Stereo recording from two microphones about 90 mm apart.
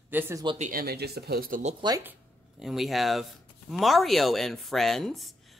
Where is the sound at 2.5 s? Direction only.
5° right (ahead or behind).